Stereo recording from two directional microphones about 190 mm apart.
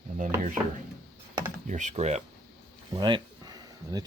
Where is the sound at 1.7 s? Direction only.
40° right (ahead or behind).